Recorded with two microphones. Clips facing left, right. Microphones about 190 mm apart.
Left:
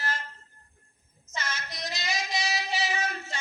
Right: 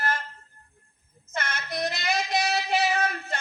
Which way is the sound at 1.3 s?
60° right (ahead or behind).